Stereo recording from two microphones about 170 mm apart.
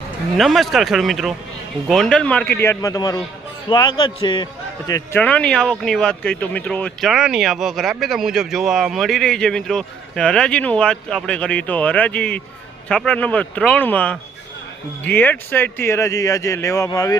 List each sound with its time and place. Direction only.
0.3 s a man's voice: centre (ahead or behind); by 5.2 s 20° left (ahead or behind)
5.2 s speech: 5° left (ahead or behind)